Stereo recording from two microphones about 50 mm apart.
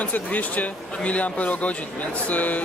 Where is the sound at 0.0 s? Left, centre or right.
Left.